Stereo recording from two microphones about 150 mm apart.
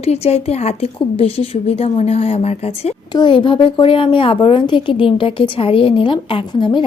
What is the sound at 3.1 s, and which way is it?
A woman's voice, 30° left (ahead or behind).